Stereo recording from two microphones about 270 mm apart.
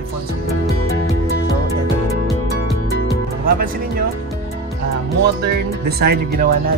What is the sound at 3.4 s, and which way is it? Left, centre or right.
Speech, right.